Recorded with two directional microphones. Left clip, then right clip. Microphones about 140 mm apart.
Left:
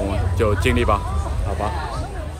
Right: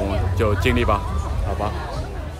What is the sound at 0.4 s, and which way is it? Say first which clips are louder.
Speech: left 1 dB; 20° right (ahead or behind).